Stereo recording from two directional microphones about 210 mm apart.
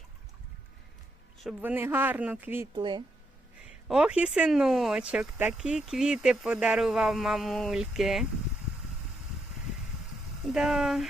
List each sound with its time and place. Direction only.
1.5 s speech: 10° right (ahead or behind)
2.7 s speech: 20° right (ahead or behind)
3.8 s speech: 5° right (ahead or behind)
10.5 s speech: centre (ahead or behind)